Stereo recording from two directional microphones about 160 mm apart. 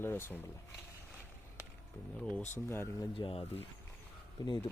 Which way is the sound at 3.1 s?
35° left (ahead or behind).